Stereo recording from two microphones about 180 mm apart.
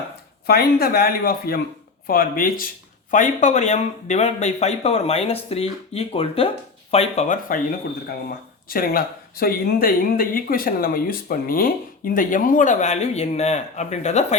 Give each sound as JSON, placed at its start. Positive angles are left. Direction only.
{"t": 0.4, "sound": "speech", "side_deg": 55}
{"t": 8.7, "sound": "speech", "side_deg": 55}